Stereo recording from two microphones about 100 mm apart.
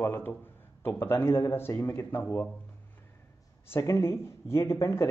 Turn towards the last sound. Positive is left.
turn(degrees=30)  # may be behind; listen again after turning